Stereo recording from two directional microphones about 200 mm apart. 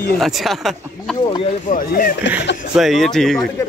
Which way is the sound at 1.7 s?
45° left (ahead or behind).